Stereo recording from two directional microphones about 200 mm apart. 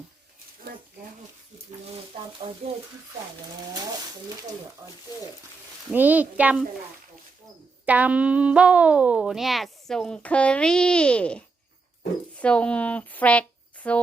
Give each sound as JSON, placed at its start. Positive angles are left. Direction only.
{"t": 2.1, "sound": "speech", "side_deg": -30}
{"t": 5.9, "sound": "a child's voice", "side_deg": -10}
{"t": 7.9, "sound": "speech", "side_deg": -5}